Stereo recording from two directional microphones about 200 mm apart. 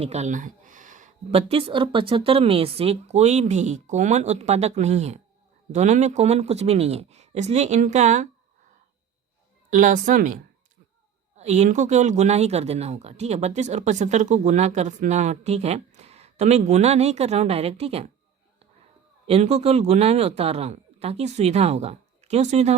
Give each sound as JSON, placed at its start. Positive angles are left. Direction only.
{"t": 0.0, "sound": "speech", "side_deg": -35}
{"t": 9.6, "sound": "speech", "side_deg": -40}
{"t": 19.3, "sound": "speech", "side_deg": -35}